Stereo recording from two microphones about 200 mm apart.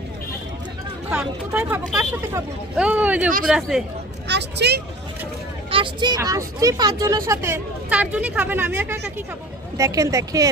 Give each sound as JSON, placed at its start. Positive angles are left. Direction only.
{"t": 1.1, "sound": "speech", "side_deg": -10}
{"t": 4.3, "sound": "speech", "side_deg": -55}
{"t": 5.7, "sound": "speech", "side_deg": -25}